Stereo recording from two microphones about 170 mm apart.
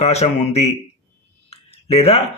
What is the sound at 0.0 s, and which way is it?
Speech, 40° left (ahead or behind).